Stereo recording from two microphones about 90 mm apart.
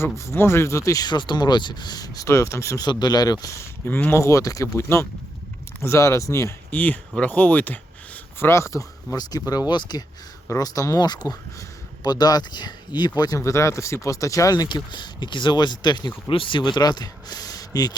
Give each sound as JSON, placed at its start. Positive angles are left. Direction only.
{"t": 0.0, "sound": "speech", "side_deg": 30}
{"t": 1.1, "sound": "speech", "side_deg": 55}
{"t": 2.8, "sound": "speech", "side_deg": 50}
{"t": 3.4, "sound": "speech", "side_deg": 30}
{"t": 6.7, "sound": "speech", "side_deg": 20}
{"t": 7.2, "sound": "a sound", "side_deg": 20}
{"t": 8.4, "sound": "speech", "side_deg": 30}
{"t": 9.5, "sound": "speech", "side_deg": 50}
{"t": 10.5, "sound": "speech", "side_deg": 40}
{"t": 14.5, "sound": "speech", "side_deg": 55}
{"t": 16.3, "sound": "speech", "side_deg": 70}